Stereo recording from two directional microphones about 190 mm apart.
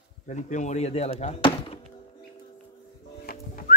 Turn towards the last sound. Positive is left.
turn(degrees=50)  # may be behind; listen again after turning